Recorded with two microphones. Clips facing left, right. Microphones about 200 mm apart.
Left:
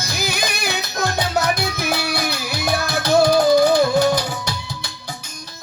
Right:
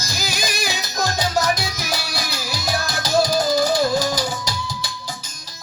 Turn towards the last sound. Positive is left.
turn(degrees=60)  # may be behind; listen again after turning